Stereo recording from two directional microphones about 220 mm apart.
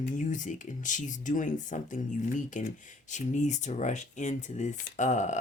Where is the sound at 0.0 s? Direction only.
35° left (ahead or behind).